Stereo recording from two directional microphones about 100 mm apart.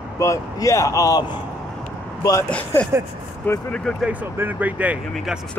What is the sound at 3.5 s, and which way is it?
Speech, 20° left (ahead or behind).